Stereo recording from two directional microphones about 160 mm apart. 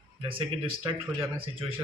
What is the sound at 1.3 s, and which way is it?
Speech, 35° right (ahead or behind).